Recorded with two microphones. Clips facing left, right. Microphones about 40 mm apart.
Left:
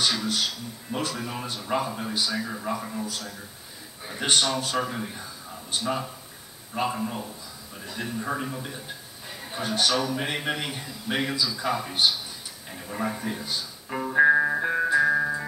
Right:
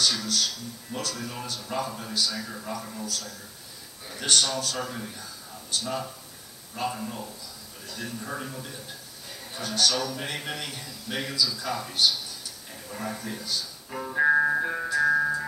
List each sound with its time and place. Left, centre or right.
0.0 s a man's voice: left
14.3 s music: centre
14.6 s music: left